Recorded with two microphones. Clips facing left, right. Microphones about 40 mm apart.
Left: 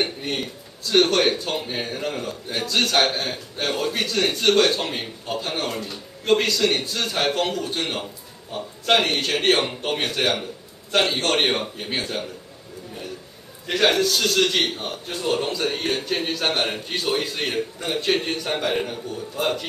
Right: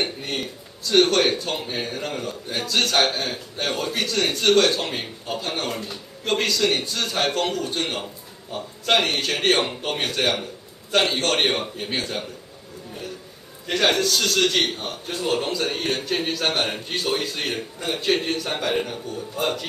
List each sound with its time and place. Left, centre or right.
0.0 s speech: centre
13.7 s speech: centre